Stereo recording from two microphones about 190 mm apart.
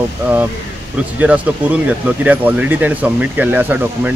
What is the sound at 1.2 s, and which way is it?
Speech, 5° right (ahead or behind).